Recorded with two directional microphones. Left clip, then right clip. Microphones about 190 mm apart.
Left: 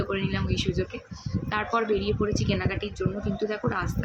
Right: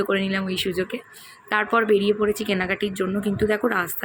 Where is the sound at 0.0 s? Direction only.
25° right (ahead or behind).